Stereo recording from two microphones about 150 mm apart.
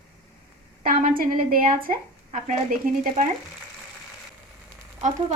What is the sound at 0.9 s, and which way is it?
A woman's voice, 70° right (ahead or behind).